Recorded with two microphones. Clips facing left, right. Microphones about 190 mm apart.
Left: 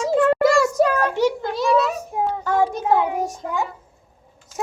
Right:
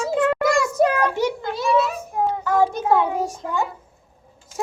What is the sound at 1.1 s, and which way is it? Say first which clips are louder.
Speech: left 3 dB; 5° right (ahead or behind).